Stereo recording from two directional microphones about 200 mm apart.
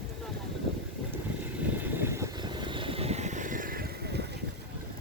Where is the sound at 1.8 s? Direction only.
10° right (ahead or behind); by 4.3 s 55° right (ahead or behind).